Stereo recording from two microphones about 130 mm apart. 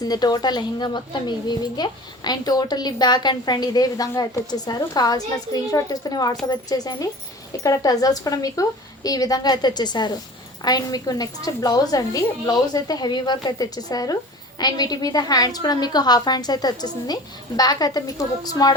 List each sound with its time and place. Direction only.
0.0 s a woman's voice: 30° left (ahead or behind)